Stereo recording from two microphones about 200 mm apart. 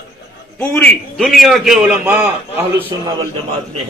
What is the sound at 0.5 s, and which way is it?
A man's voice, 10° left (ahead or behind).